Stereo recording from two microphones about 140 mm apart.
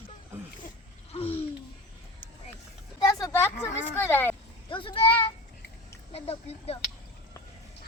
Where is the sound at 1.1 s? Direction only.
40° left (ahead or behind).